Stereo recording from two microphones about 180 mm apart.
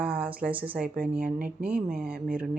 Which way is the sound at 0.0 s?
10° right (ahead or behind).